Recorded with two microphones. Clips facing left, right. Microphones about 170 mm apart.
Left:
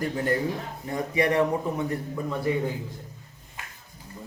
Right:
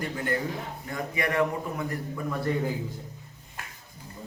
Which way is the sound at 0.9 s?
30° left (ahead or behind).